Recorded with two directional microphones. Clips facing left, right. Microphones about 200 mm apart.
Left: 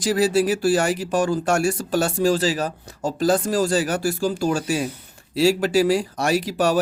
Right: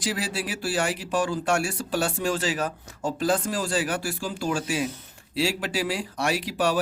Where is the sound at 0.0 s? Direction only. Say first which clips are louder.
Left 11 dB; 45° left (ahead or behind).